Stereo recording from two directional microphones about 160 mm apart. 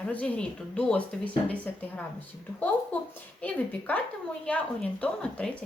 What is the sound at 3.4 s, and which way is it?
A woman's voice, 10° left (ahead or behind).